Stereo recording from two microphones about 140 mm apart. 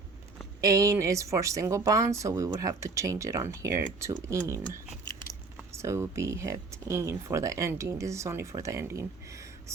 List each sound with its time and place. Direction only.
0.6 s speech: 25° right (ahead or behind)
5.7 s speech: 20° right (ahead or behind)